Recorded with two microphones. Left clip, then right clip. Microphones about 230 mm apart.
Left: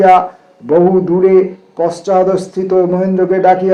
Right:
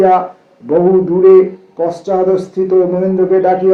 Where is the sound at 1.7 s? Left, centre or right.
Left.